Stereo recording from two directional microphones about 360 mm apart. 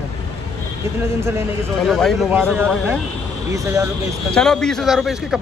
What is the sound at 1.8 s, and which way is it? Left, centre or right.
Speech, centre.